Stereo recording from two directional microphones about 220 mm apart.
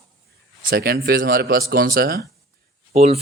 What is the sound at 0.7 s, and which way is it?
Speech, 45° right (ahead or behind).